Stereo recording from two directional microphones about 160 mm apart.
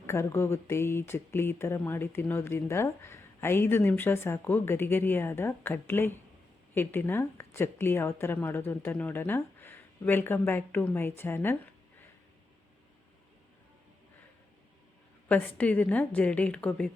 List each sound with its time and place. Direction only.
0.0 s speech: 15° left (ahead or behind)
15.3 s speech: 10° left (ahead or behind)